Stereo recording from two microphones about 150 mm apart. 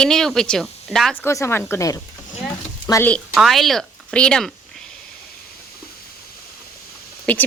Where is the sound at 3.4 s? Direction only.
Centre (ahead or behind).